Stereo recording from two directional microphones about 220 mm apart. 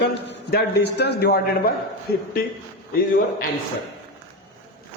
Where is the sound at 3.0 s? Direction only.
40° left (ahead or behind).